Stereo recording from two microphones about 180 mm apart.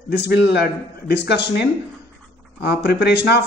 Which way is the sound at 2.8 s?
65° left (ahead or behind).